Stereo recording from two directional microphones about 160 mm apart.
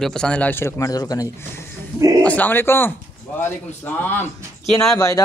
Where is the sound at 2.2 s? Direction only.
10° left (ahead or behind).